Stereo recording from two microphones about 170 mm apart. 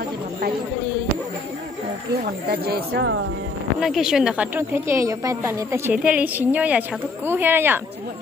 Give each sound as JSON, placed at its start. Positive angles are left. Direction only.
{"t": 2.5, "sound": "speech", "side_deg": -65}
{"t": 3.8, "sound": "a woman's voice", "side_deg": -5}